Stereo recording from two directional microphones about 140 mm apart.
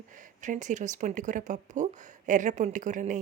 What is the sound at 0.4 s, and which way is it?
Speech, 60° right (ahead or behind).